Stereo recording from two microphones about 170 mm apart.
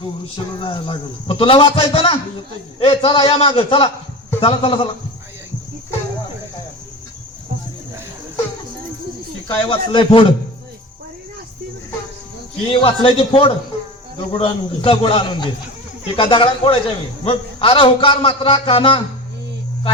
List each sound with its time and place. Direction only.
0.6 s a man's voice: 30° left (ahead or behind)
9.6 s a man's voice: 30° left (ahead or behind)
12.7 s a man's voice: 30° left (ahead or behind)